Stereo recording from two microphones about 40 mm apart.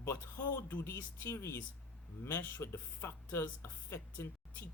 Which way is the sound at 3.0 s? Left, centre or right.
Left.